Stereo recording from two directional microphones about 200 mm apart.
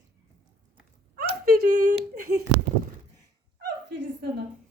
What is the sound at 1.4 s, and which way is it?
Speech, 45° right (ahead or behind).